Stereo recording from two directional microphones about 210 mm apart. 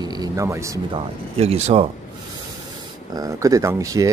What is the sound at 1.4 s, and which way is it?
Speech, 30° right (ahead or behind).